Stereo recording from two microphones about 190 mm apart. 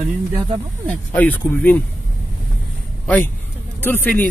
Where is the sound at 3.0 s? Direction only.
10° left (ahead or behind).